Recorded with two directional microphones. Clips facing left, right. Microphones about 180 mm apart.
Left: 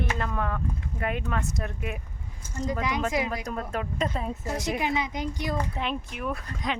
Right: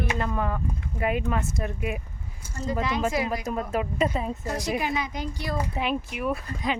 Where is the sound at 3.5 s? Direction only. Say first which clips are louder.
Right 4 dB; 5° right (ahead or behind).